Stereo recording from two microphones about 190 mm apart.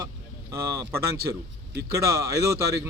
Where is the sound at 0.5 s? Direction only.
15° right (ahead or behind).